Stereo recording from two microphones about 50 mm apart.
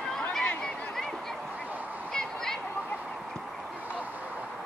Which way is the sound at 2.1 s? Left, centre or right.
Centre.